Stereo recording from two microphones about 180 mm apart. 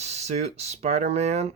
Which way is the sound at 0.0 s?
40° right (ahead or behind).